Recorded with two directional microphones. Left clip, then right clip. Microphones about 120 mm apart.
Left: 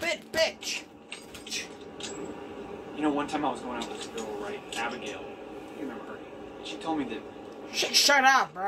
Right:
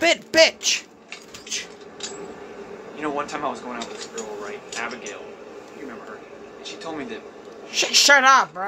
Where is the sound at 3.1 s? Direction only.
40° right (ahead or behind).